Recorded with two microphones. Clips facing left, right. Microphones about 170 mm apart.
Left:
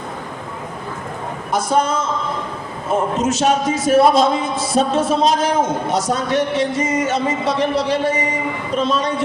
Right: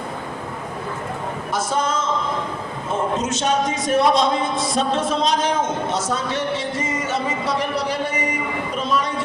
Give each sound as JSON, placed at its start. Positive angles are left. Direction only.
{"t": 1.5, "sound": "a man's voice", "side_deg": 10}
{"t": 3.2, "sound": "a man's voice", "side_deg": 10}